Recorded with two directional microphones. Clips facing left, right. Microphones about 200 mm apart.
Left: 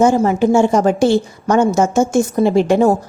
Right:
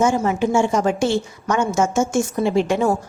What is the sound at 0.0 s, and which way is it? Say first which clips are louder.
A woman's voice: left 6 dB; 35° left (ahead or behind).